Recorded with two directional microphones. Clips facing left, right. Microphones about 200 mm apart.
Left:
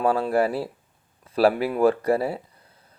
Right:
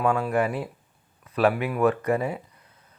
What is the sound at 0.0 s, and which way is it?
Speech, 35° left (ahead or behind).